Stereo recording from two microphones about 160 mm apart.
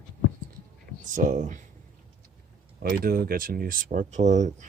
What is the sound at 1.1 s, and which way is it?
Speech, 50° right (ahead or behind).